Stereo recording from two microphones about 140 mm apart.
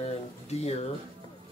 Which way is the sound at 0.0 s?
50° left (ahead or behind).